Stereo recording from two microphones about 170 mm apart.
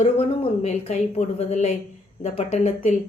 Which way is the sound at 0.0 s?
40° left (ahead or behind).